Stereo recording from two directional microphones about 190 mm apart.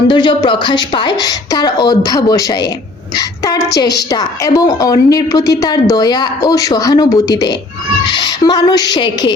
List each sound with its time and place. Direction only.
0.1 s a woman's voice: 25° left (ahead or behind)